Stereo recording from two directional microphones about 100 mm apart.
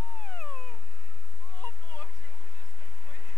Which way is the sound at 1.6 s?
20° left (ahead or behind).